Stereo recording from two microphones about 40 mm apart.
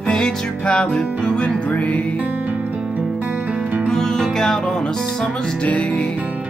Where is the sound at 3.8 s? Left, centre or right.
Centre.